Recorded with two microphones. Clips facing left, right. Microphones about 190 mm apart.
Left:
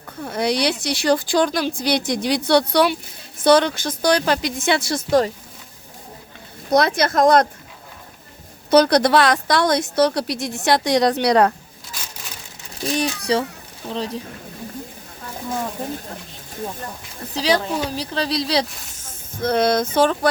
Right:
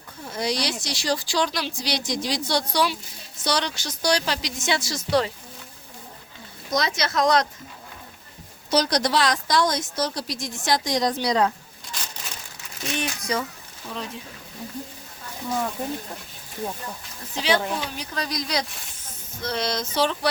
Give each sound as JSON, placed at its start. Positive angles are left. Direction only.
{"t": 0.2, "sound": "speech", "side_deg": 60}
{"t": 6.7, "sound": "speech", "side_deg": 60}
{"t": 8.7, "sound": "speech", "side_deg": 60}
{"t": 12.8, "sound": "speech", "side_deg": 35}
{"t": 17.3, "sound": "speech", "side_deg": 40}
{"t": 18.9, "sound": "speech", "side_deg": 50}